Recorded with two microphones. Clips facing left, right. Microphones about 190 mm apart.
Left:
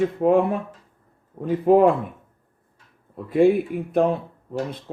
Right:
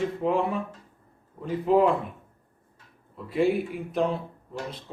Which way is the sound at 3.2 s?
50° left (ahead or behind).